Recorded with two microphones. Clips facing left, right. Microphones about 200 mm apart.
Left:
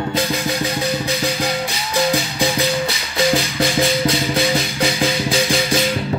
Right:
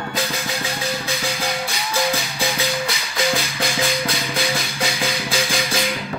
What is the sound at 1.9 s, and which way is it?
Music, 15° left (ahead or behind).